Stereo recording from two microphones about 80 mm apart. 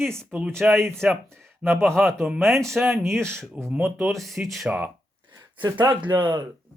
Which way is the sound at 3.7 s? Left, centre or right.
Right.